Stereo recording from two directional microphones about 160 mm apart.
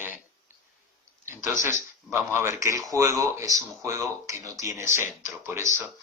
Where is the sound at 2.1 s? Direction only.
15° right (ahead or behind).